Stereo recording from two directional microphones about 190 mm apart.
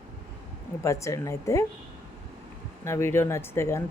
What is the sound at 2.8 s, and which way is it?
Speech, 15° left (ahead or behind).